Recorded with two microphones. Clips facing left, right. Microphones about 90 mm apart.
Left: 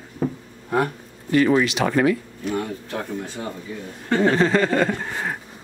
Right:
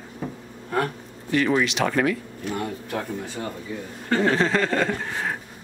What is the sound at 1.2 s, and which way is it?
Speech, 5° left (ahead or behind).